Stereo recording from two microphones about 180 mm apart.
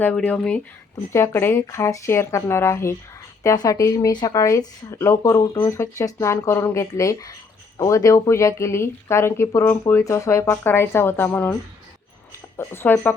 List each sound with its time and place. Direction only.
0.2 s speech: 5° left (ahead or behind)
12.5 s speech: 10° left (ahead or behind)